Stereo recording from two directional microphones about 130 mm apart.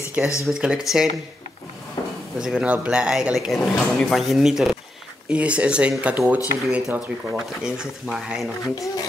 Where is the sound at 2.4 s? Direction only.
5° right (ahead or behind).